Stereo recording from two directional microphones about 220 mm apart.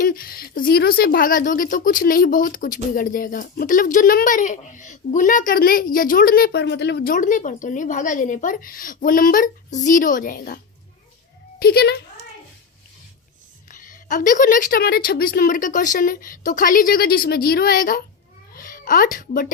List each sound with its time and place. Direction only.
0.0 s speech: 40° left (ahead or behind)
11.6 s speech: 45° left (ahead or behind)
13.7 s speech: 35° left (ahead or behind)